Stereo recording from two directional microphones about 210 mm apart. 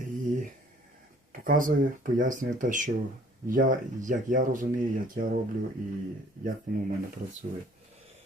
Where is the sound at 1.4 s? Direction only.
40° right (ahead or behind).